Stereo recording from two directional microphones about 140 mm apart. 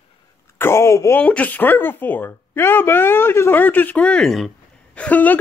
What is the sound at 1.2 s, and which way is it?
Speech, 10° left (ahead or behind).